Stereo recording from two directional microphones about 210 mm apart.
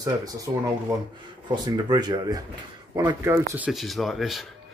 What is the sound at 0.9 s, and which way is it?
Speech, 20° right (ahead or behind).